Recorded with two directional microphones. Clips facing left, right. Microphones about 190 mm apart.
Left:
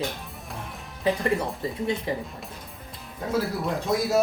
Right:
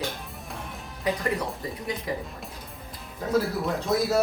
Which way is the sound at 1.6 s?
30° left (ahead or behind).